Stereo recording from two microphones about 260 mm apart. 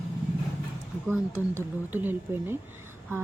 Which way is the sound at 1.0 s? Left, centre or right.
Centre.